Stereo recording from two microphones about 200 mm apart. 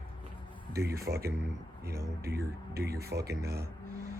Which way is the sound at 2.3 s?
50° right (ahead or behind).